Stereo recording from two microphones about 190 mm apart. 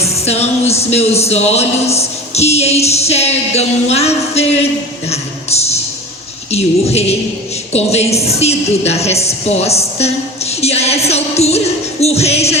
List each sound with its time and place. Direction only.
0.0 s a woman's voice: 35° left (ahead or behind)